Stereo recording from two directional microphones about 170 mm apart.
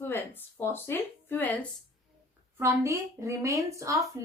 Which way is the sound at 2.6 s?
15° right (ahead or behind).